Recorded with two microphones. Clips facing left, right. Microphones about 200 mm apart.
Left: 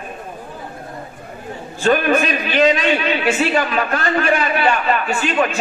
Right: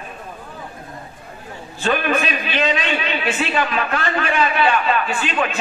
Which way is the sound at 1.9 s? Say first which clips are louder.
Left 4 dB; 40° left (ahead or behind).